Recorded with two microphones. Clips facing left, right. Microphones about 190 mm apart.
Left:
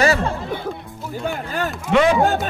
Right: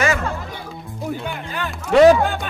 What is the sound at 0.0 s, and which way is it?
Music, 35° left (ahead or behind).